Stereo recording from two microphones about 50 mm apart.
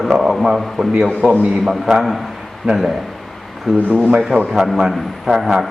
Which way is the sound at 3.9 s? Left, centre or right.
Right.